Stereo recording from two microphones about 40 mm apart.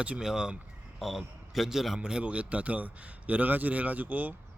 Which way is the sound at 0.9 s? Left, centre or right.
Centre.